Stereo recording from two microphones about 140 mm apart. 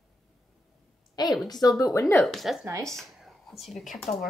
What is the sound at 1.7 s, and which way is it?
Speech, 25° left (ahead or behind).